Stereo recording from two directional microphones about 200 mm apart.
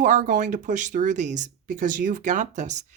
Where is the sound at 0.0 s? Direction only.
40° right (ahead or behind).